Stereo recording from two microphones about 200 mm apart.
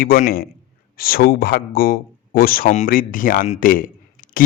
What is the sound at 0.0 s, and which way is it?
Speech, 45° left (ahead or behind).